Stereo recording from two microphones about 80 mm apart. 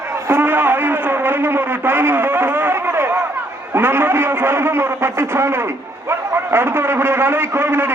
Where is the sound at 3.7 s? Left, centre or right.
Right.